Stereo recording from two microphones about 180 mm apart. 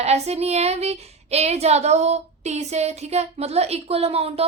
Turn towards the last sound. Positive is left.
turn(degrees=-35)  # may be behind; listen again after turning